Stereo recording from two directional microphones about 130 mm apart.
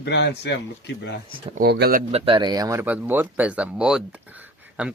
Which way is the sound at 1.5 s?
90° right.